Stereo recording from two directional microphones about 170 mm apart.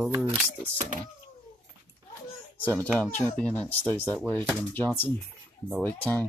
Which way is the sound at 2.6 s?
10° left (ahead or behind).